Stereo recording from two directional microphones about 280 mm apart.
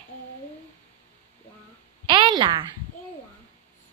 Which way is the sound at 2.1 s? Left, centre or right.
Centre.